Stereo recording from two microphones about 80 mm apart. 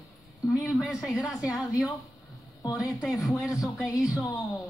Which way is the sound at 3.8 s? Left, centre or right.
Centre.